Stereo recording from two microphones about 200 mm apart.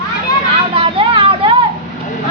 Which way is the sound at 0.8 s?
25° right (ahead or behind).